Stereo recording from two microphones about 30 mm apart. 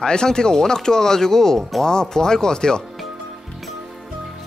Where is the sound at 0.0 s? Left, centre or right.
Left.